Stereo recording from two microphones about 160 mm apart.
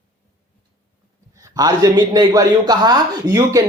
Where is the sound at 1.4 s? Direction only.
20° right (ahead or behind).